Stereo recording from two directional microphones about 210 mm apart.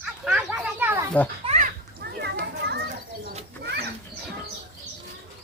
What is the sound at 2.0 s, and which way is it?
Children playing, 50° right (ahead or behind).